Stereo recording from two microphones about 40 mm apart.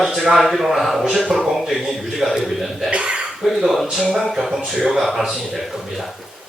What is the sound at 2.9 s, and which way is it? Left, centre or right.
Cough, right.